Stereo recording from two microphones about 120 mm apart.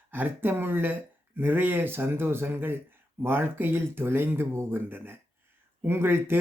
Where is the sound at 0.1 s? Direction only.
15° right (ahead or behind).